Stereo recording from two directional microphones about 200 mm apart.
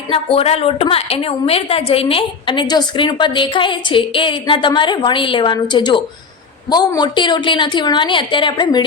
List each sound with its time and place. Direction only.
0.1 s a woman's voice: 30° left (ahead or behind)